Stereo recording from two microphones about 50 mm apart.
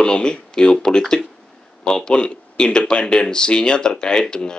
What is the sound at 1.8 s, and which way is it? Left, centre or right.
Speech, centre.